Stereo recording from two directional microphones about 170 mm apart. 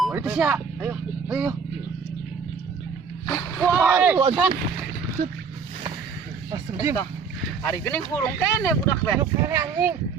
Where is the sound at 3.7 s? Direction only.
10° right (ahead or behind).